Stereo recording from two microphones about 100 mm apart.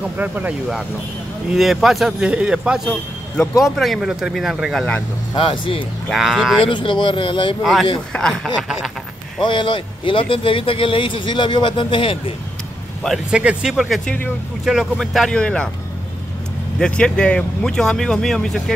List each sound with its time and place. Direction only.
0.0 s a man's voice: 15° right (ahead or behind)
1.5 s a man's voice: centre (ahead or behind)
5.3 s speech: 60° left (ahead or behind)
6.0 s speech: 5° right (ahead or behind)
6.6 s speech: 55° left (ahead or behind)
7.6 s speech: centre (ahead or behind)
8.6 s a man's voice: 5° right (ahead or behind)
9.4 s speech: 55° left (ahead or behind)
13.3 s a man's voice: 10° right (ahead or behind)
14.0 s speech: 15° left (ahead or behind)
14.6 s speech: 5° right (ahead or behind)
16.8 s speech: 10° left (ahead or behind)